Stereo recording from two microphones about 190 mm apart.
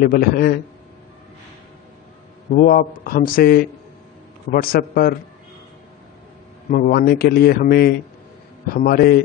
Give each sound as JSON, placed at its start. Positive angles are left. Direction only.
{"t": 0.0, "sound": "speech", "side_deg": 50}
{"t": 2.6, "sound": "speech", "side_deg": 50}
{"t": 6.7, "sound": "speech", "side_deg": 45}